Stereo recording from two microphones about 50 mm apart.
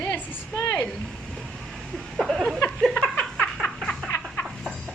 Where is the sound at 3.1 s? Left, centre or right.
Left.